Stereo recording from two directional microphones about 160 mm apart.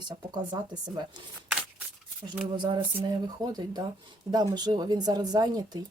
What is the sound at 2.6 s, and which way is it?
Speech, 30° right (ahead or behind).